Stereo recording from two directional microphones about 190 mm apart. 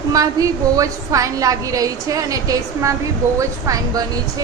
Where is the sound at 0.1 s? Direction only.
20° right (ahead or behind).